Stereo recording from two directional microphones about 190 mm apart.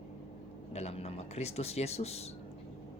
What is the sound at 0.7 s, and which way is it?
Speech, 35° left (ahead or behind).